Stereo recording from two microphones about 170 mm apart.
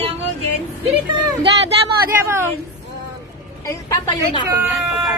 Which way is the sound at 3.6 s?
25° left (ahead or behind).